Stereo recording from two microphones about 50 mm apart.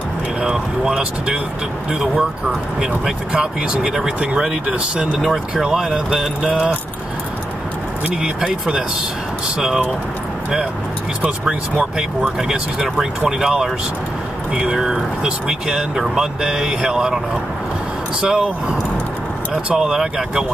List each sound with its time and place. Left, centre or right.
0.4 s a sound: centre
1.9 s speech: centre
5.6 s speech: centre
8.1 s speech: centre
11.2 s speech: centre
18.2 s speech: centre